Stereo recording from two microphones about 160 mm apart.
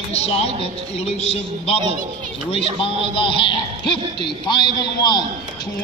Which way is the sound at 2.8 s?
35° left (ahead or behind).